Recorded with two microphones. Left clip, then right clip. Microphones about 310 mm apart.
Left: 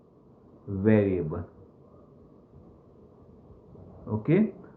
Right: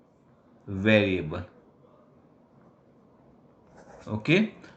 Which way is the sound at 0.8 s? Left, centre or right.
Right.